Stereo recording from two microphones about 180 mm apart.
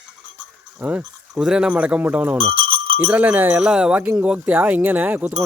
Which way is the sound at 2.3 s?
30° right (ahead or behind).